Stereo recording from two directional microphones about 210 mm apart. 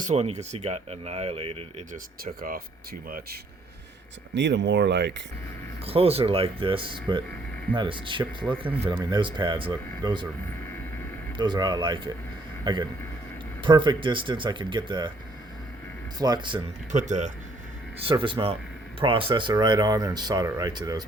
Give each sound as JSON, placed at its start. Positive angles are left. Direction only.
{"t": 0.0, "sound": "speech", "side_deg": -30}
{"t": 2.2, "sound": "speech", "side_deg": -45}
{"t": 4.4, "sound": "speech", "side_deg": -55}
{"t": 5.8, "sound": "speech", "side_deg": -25}
{"t": 11.3, "sound": "speech", "side_deg": -20}
{"t": 16.1, "sound": "speech", "side_deg": -20}
{"t": 16.9, "sound": "speech", "side_deg": -35}
{"t": 18.0, "sound": "speech", "side_deg": -25}